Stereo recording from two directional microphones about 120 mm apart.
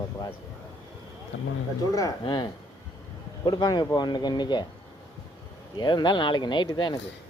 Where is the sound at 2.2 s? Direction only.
40° left (ahead or behind).